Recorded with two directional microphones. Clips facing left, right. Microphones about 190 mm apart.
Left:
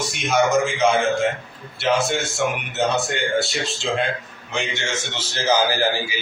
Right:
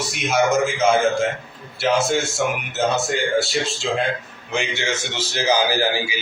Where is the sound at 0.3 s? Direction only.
Centre (ahead or behind).